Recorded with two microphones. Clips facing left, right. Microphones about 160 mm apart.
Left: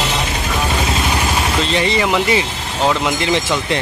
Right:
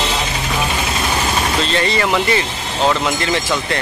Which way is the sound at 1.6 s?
15° left (ahead or behind).